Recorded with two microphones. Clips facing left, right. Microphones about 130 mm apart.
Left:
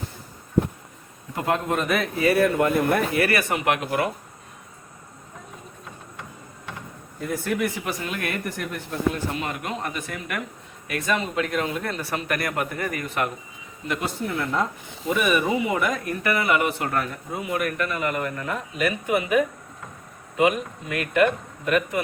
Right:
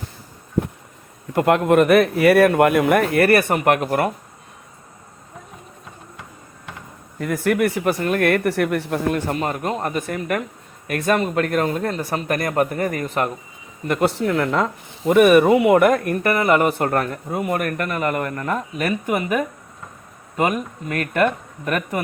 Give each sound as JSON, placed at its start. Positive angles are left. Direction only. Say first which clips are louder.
{"t": 1.4, "sound": "speech", "louder": "right 9 dB", "side_deg": -65}
{"t": 7.2, "sound": "speech", "louder": "right 6 dB", "side_deg": -75}
{"t": 9.4, "sound": "speech", "louder": "right 6 dB", "side_deg": -40}
{"t": 13.8, "sound": "speech", "louder": "right 9 dB", "side_deg": -50}
{"t": 14.2, "sound": "speech", "louder": "right 6 dB", "side_deg": -90}
{"t": 15.0, "sound": "speech", "louder": "right 10 dB", "side_deg": -55}